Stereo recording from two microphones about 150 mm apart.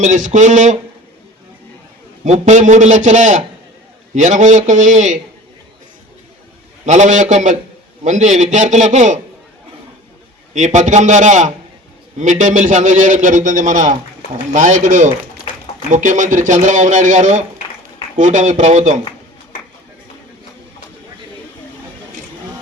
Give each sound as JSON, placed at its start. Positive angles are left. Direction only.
{"t": 0.0, "sound": "a man's voice", "side_deg": -55}
{"t": 2.2, "sound": "a man's voice", "side_deg": -50}
{"t": 6.8, "sound": "a man's voice", "side_deg": -55}
{"t": 10.5, "sound": "a man's voice", "side_deg": -55}